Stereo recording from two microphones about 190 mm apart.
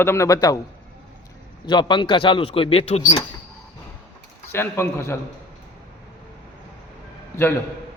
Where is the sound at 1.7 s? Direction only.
25° left (ahead or behind).